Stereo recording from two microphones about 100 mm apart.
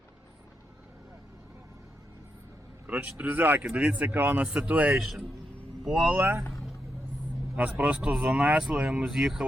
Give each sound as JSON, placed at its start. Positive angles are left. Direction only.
{"t": 2.8, "sound": "speech", "side_deg": -15}
{"t": 7.5, "sound": "speech", "side_deg": -15}